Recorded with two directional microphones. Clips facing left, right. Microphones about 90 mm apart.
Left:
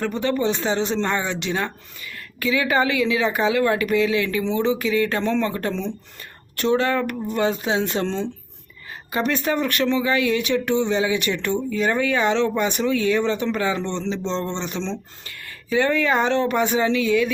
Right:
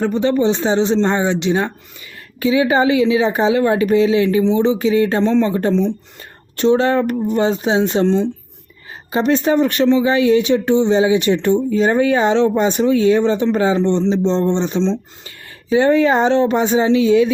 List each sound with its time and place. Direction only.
0.0 s speech: 25° right (ahead or behind)